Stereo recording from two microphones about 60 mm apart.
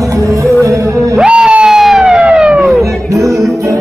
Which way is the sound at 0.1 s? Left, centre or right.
Right.